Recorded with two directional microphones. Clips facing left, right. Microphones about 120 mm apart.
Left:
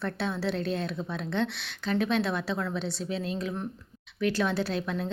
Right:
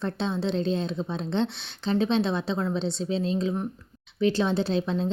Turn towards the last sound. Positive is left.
turn(degrees=-25)  # may be behind; listen again after turning